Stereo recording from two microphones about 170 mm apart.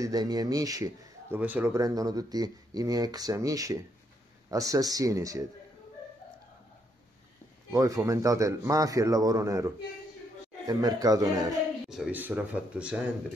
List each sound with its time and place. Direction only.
0.0 s speech: 20° right (ahead or behind)
1.4 s speech: 10° right (ahead or behind)
7.7 s speech: 20° right (ahead or behind)
10.7 s speech: 25° right (ahead or behind)
11.9 s speech: 5° right (ahead or behind)